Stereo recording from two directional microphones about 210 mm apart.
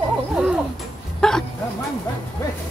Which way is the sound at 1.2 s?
Centre (ahead or behind).